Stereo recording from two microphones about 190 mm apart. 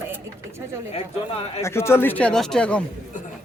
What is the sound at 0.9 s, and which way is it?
Speech, 30° left (ahead or behind).